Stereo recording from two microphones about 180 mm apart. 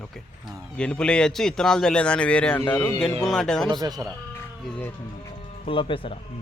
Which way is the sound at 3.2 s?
5° left (ahead or behind).